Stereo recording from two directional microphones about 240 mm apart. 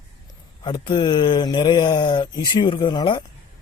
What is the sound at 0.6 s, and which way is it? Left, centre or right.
Speech, centre.